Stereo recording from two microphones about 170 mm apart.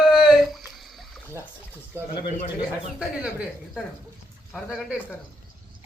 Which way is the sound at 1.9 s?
15° right (ahead or behind).